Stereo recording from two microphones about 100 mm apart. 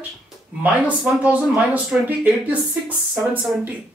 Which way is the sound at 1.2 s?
15° right (ahead or behind).